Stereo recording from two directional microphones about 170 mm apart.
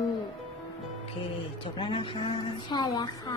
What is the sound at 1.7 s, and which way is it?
A woman's voice, 30° left (ahead or behind).